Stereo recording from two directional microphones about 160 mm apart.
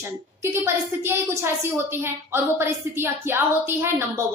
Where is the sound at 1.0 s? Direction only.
15° right (ahead or behind).